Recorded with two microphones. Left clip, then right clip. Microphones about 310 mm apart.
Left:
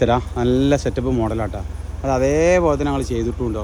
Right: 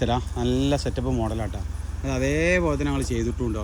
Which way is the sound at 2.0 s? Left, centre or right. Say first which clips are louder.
Left 7 dB; centre.